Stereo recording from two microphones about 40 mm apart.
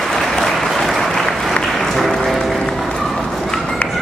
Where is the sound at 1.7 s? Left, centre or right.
Centre.